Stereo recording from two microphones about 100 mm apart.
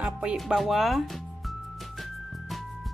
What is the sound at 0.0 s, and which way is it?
Music, 10° right (ahead or behind).